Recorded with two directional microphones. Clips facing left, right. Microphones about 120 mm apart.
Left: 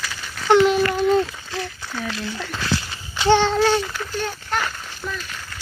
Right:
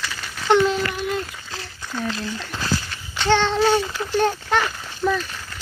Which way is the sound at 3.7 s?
15° right (ahead or behind).